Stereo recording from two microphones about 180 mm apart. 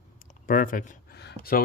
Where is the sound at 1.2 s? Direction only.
60° left (ahead or behind).